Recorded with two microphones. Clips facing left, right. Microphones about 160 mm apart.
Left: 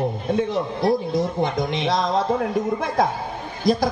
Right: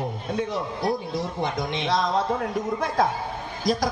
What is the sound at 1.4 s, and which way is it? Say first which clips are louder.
Speech: left 4 dB; 20° left (ahead or behind).